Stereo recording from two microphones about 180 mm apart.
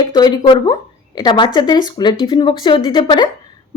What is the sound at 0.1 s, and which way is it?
Speech, 25° left (ahead or behind).